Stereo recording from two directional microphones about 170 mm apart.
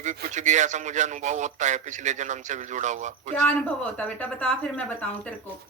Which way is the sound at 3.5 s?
5° left (ahead or behind).